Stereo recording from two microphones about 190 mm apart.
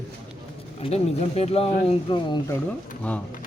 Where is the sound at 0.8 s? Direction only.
35° left (ahead or behind).